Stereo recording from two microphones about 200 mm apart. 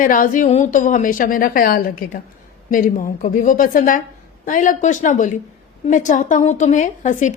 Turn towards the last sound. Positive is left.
turn(degrees=40)  # may be behind; listen again after turning